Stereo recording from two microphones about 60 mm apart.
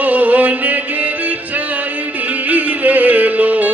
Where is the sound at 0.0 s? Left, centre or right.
Right.